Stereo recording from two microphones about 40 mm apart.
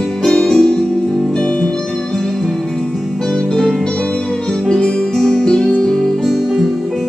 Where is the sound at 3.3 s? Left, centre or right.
Centre.